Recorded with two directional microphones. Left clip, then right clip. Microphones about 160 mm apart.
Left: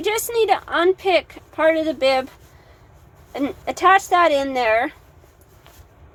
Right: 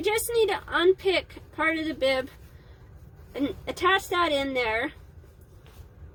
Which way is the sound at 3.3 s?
20° right (ahead or behind).